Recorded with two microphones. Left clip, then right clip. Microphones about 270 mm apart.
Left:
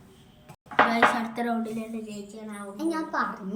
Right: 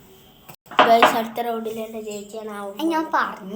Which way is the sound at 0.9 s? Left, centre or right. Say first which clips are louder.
Right 8 dB; centre.